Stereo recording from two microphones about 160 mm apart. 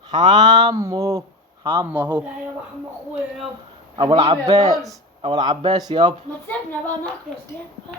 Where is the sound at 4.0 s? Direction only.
25° right (ahead or behind).